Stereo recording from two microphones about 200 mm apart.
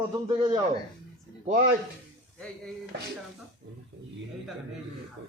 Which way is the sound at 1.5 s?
45° right (ahead or behind).